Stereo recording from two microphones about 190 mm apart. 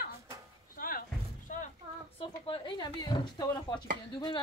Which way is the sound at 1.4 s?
40° left (ahead or behind).